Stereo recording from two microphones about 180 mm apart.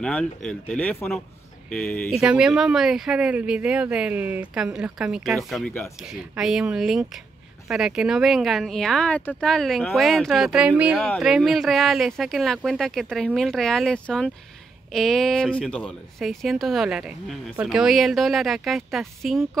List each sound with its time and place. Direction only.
0.0 s speech: 5° left (ahead or behind)